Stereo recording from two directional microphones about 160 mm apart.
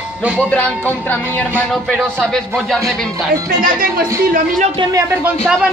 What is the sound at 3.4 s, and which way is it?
Speech, 65° right (ahead or behind).